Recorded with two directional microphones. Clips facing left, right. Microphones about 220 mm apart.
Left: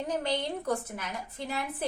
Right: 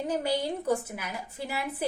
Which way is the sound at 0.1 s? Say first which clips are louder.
Right 2 dB; 10° right (ahead or behind).